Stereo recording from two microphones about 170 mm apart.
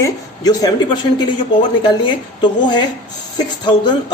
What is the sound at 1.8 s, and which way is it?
Speech, 25° left (ahead or behind).